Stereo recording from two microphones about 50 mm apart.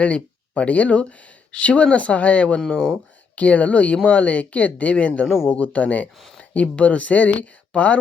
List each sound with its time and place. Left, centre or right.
0.0 s speech: left
5.2 s speech: centre
5.5 s speech: left